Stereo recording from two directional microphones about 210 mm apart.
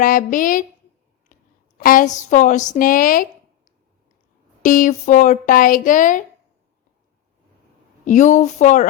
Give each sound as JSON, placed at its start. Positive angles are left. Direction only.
{"t": 0.0, "sound": "speech", "side_deg": 40}
{"t": 1.3, "sound": "a sound", "side_deg": 35}
{"t": 1.8, "sound": "speech", "side_deg": 40}
{"t": 4.6, "sound": "speech", "side_deg": 40}
{"t": 8.0, "sound": "speech", "side_deg": 35}